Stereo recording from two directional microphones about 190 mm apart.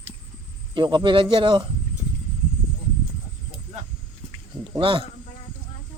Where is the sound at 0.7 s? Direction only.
25° right (ahead or behind).